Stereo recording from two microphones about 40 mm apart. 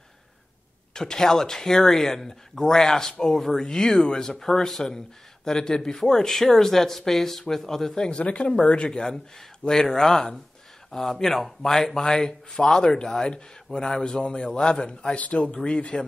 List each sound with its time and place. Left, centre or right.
0.9 s speech: centre
8.1 s speech: left
9.7 s speech: centre; by 15.5 s left
15.5 s speech: left